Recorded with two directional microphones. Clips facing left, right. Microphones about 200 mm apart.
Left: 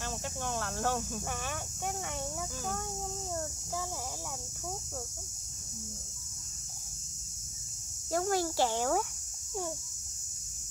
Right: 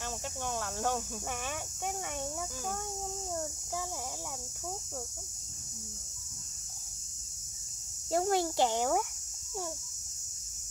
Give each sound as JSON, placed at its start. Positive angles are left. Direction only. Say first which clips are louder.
{"t": 0.0, "sound": "cricket", "louder": "left 1 dB", "side_deg": -10}
{"t": 8.1, "sound": "speech", "louder": "right 1 dB", "side_deg": -25}